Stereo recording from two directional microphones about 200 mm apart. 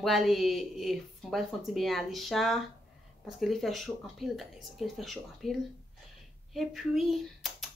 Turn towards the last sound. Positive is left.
turn(degrees=0)  # may be behind; listen again after turning